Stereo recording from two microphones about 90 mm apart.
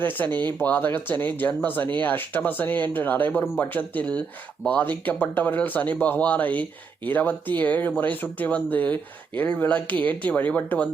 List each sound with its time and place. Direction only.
0.0 s speech: 20° left (ahead or behind)